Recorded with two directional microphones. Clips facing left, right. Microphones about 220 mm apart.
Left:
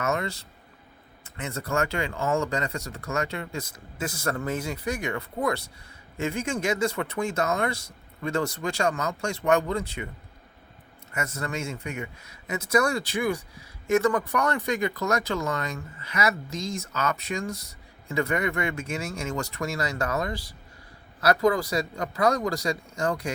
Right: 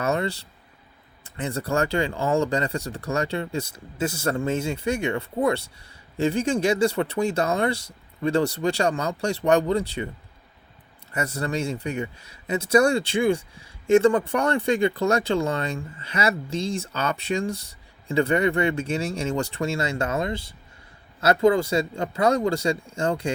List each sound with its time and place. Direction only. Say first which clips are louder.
0.0 s speech: right 3 dB; 30° right (ahead or behind)
11.1 s speech: right 5 dB; 35° right (ahead or behind)